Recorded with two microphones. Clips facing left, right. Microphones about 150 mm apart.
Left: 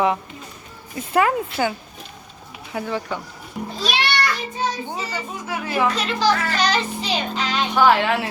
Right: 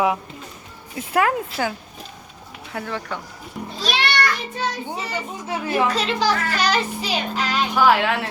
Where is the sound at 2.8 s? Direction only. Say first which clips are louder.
Left 3 dB; 5° left (ahead or behind).